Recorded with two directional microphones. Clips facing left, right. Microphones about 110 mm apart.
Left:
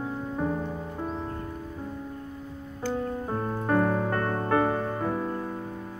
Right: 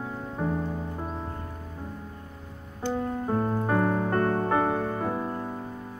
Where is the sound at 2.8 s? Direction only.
15° right (ahead or behind).